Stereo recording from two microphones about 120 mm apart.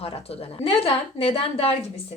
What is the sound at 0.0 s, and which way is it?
A woman's voice, 55° left (ahead or behind).